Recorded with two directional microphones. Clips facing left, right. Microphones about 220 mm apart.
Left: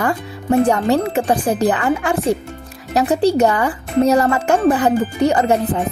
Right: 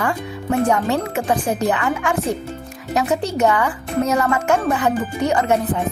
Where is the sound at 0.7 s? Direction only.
35° left (ahead or behind).